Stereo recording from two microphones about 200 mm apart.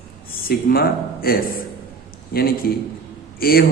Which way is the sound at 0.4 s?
50° left (ahead or behind).